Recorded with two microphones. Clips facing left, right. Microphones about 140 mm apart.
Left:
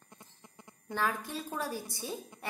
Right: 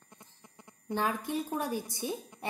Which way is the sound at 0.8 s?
20° right (ahead or behind).